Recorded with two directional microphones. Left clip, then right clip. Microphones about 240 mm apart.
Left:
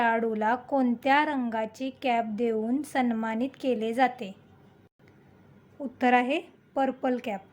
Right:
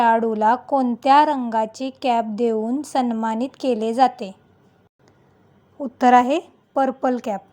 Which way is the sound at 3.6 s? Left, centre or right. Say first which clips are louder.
Right 7 dB; centre.